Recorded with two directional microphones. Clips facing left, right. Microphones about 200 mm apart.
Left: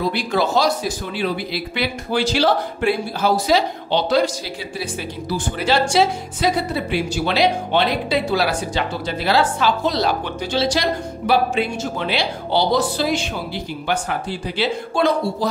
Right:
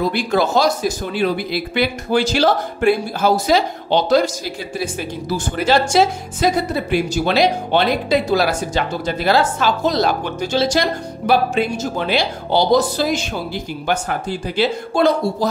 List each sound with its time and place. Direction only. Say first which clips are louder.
0.1 s speech: right 2 dB; 45° right (ahead or behind)
5.9 s speech: right 2 dB; 45° right (ahead or behind)
14.6 s speech: right 3 dB; 45° right (ahead or behind)